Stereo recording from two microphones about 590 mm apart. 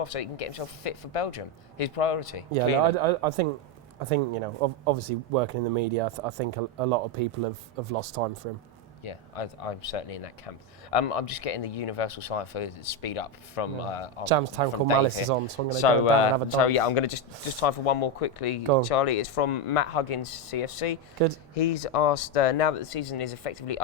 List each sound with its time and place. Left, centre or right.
0.0 s speech: left
2.9 s speech: right
9.0 s speech: left
14.3 s speech: right
14.8 s speech: left
15.3 s speech: right
15.8 s speech: left